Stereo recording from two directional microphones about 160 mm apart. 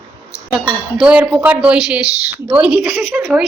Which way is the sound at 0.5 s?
5° right (ahead or behind).